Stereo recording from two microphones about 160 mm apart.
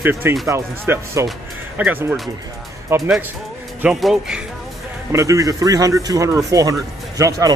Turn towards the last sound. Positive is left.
turn(degrees=-20)  # may be behind; listen again after turning